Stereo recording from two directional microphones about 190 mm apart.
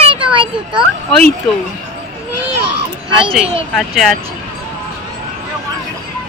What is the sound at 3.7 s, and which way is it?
Speech, centre (ahead or behind).